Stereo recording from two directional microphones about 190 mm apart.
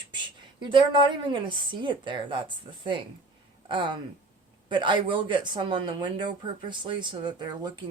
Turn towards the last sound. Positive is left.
turn(degrees=-20)  # may be behind; listen again after turning